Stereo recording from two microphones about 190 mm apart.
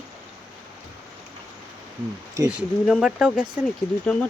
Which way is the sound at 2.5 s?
5° right (ahead or behind).